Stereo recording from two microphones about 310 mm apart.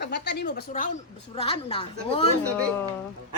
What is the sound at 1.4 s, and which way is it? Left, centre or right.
Speech, centre.